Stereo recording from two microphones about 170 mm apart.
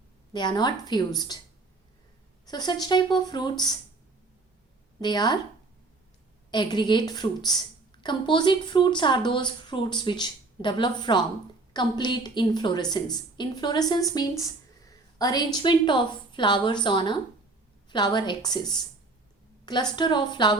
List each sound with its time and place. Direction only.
0.3 s speech: 25° left (ahead or behind)
2.5 s speech: 25° left (ahead or behind)
4.9 s speech: 25° left (ahead or behind)
6.5 s a woman's voice: 25° left (ahead or behind)